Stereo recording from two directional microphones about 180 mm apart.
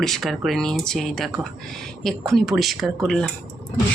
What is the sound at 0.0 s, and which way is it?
Speech, centre (ahead or behind).